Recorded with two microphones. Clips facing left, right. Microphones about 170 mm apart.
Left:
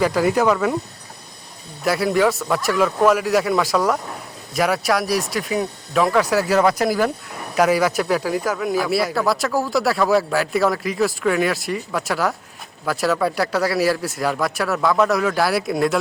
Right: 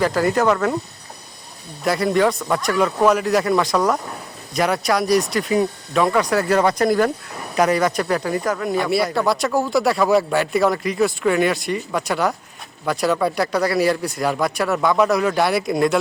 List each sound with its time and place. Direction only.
0.0 s speech: 10° left (ahead or behind)
1.8 s speech: centre (ahead or behind)